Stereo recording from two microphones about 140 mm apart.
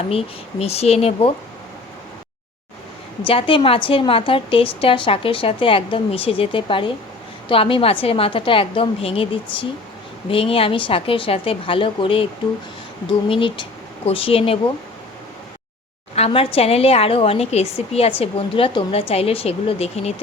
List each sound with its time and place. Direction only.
0.1 s a woman's voice: 45° left (ahead or behind)
3.2 s a woman's voice: 40° left (ahead or behind)
16.1 s a woman's voice: 45° left (ahead or behind)